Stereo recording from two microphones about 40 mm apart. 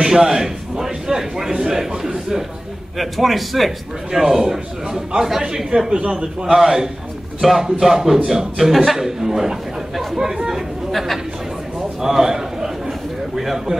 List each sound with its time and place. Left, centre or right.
0.0 s a man's voice: centre
3.0 s a man's voice: centre
5.7 s speech: right
6.0 s a man's voice: centre
10.9 s speech: centre
12.0 s a sound: centre
13.4 s a man's voice: centre